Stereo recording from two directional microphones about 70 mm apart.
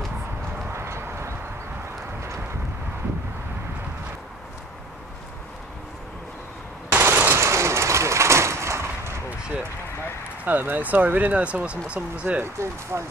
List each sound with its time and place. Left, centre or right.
0.7 s clip-clop: right
6.9 s machine gun: right
9.3 s a sound: right
10.4 s speech: right
12.4 s speech: right